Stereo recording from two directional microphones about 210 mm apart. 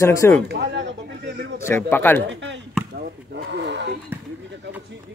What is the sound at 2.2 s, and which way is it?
Speech, 60° right (ahead or behind).